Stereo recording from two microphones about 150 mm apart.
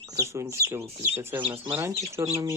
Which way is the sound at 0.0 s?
20° right (ahead or behind).